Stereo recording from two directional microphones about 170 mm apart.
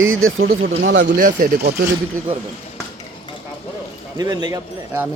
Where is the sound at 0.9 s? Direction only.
90° right.